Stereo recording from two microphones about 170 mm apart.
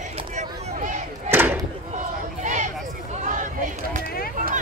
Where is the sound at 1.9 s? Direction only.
45° right (ahead or behind).